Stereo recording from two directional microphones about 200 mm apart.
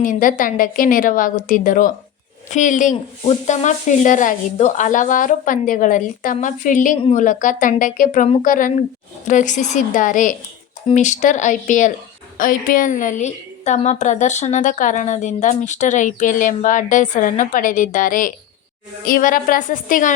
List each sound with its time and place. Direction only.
0.0 s a woman's voice: 40° left (ahead or behind)